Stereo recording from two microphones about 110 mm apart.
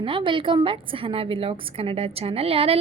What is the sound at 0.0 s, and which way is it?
A woman's voice, 50° right (ahead or behind).